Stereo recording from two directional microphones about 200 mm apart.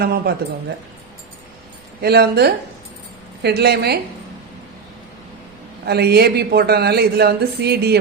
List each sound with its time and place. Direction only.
0.0 s speech: 50° right (ahead or behind)
2.0 s speech: 55° right (ahead or behind)
5.8 s speech: 50° right (ahead or behind)